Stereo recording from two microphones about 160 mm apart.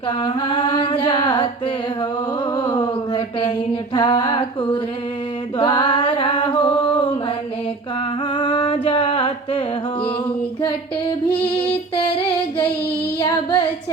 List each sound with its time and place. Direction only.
0.2 s a sound: 30° left (ahead or behind)
2.6 s mantra: 30° left (ahead or behind)
3.9 s a sound: 30° left (ahead or behind)
5.5 s music: 35° left (ahead or behind)
8.4 s music: 30° left (ahead or behind)
13.1 s child singing: 25° left (ahead or behind)